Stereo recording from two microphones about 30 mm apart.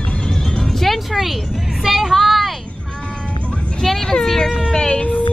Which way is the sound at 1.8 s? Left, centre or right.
Centre.